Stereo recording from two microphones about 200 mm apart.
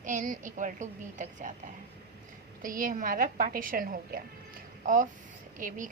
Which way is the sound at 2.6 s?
45° right (ahead or behind).